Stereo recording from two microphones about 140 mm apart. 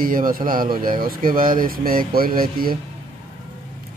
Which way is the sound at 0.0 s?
90° right.